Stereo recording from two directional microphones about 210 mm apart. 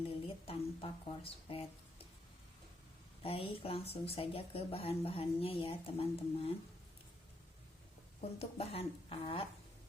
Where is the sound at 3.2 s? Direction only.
25° left (ahead or behind).